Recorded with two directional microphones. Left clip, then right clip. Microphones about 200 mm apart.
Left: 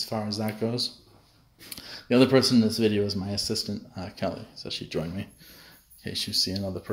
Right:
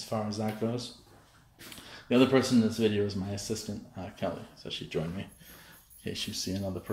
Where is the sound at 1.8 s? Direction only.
30° left (ahead or behind).